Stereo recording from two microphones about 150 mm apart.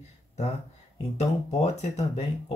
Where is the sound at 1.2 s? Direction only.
45° left (ahead or behind).